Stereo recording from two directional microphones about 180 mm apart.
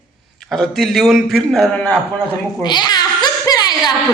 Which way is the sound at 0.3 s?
Centre (ahead or behind).